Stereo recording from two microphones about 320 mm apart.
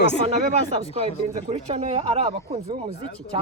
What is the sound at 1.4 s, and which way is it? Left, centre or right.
Speech, right.